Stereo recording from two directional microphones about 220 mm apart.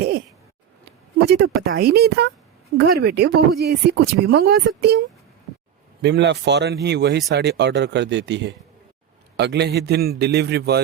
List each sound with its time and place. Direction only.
1.3 s speech: 45° right (ahead or behind)
6.0 s speech: 50° right (ahead or behind)